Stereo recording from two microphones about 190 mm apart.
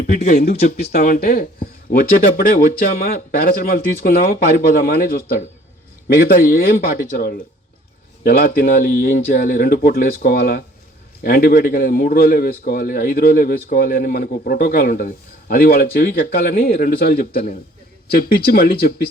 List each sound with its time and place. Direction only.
0.1 s a man's voice: 45° left (ahead or behind)
0.9 s a man's voice: 50° left (ahead or behind)